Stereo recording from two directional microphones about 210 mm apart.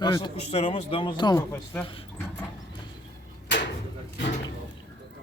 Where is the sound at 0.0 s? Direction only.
15° left (ahead or behind).